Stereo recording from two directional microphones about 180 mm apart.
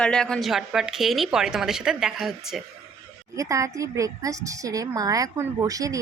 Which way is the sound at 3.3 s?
15° right (ahead or behind).